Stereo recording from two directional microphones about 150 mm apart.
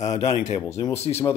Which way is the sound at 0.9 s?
45° left (ahead or behind).